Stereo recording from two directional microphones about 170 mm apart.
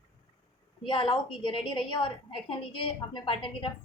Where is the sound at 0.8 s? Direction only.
30° left (ahead or behind).